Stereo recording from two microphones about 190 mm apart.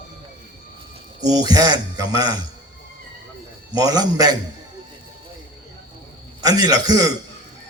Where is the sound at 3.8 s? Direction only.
20° right (ahead or behind).